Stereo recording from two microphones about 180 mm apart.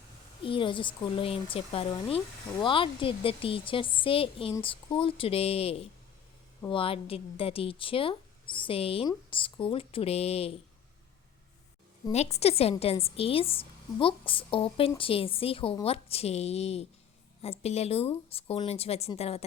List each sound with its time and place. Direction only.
0.4 s a woman's voice: 30° left (ahead or behind)
12.1 s a woman's voice: 35° left (ahead or behind)